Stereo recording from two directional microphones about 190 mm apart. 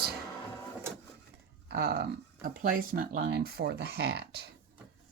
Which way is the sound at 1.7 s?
55° right (ahead or behind).